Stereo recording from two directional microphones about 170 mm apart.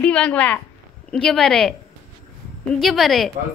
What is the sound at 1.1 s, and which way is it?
Speech, 5° left (ahead or behind).